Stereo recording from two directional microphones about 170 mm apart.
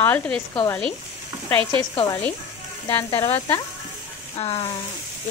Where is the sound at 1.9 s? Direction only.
25° left (ahead or behind).